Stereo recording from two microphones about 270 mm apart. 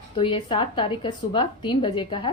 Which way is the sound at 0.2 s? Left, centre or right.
Centre.